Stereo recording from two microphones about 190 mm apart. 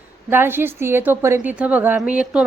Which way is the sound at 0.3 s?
10° right (ahead or behind).